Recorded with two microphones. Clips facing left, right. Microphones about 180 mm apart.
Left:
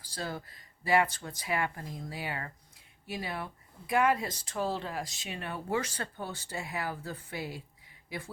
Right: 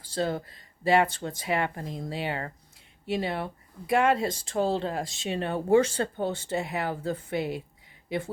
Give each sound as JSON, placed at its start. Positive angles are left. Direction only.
{"t": 0.0, "sound": "speech", "side_deg": -25}